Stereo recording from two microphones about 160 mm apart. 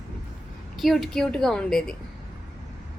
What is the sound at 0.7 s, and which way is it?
A woman's voice, centre (ahead or behind).